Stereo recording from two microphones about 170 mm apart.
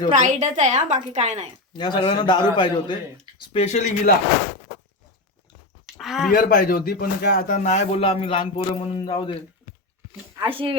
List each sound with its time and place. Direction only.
0.1 s a woman's voice: 45° right (ahead or behind)
1.7 s a man's voice: 25° left (ahead or behind); by 3.9 s 40° left (ahead or behind)
5.8 s a sound: centre (ahead or behind)
6.3 s speech: 60° left (ahead or behind)
7.4 s speech: 45° left (ahead or behind)
10.4 s speech: 30° right (ahead or behind)